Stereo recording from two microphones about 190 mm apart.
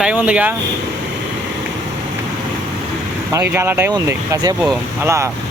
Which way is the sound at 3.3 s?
10° right (ahead or behind).